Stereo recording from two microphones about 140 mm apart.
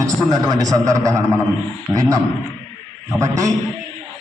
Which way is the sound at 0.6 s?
25° right (ahead or behind).